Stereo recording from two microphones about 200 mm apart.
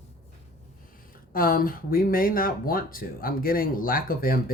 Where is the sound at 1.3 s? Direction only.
45° left (ahead or behind).